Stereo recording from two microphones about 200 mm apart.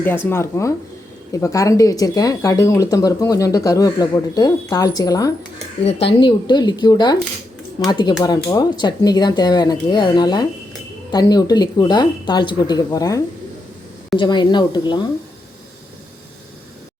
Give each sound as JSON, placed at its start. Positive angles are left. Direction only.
{"t": 0.3, "sound": "speech", "side_deg": 10}
{"t": 5.8, "sound": "speech", "side_deg": 30}